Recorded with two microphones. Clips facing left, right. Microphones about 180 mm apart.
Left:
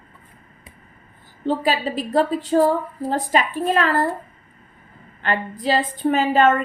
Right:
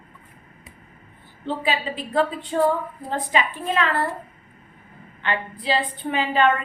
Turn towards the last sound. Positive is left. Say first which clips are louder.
# left 4 dB
turn(degrees=45)  # may be behind; listen again after turning